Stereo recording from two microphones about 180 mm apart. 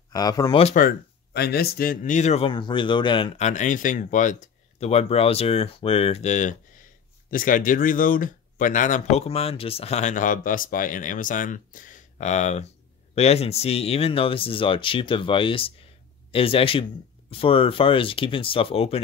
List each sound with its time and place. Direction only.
0.1 s speech: 20° left (ahead or behind)
0.7 s speech: 60° left (ahead or behind); by 18.9 s 30° left (ahead or behind)